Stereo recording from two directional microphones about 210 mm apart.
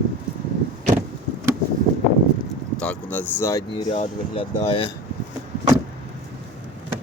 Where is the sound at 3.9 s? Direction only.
30° left (ahead or behind).